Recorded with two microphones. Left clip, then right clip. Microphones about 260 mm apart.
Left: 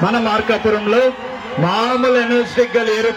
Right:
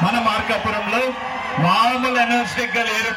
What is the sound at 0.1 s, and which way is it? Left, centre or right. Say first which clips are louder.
A man's voice: left 3 dB; centre.